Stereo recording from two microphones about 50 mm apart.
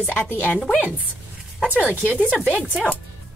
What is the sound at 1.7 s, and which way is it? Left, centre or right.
Speech, left.